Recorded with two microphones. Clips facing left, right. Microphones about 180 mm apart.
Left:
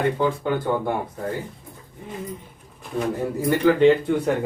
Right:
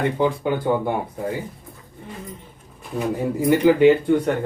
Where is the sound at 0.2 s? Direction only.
10° right (ahead or behind).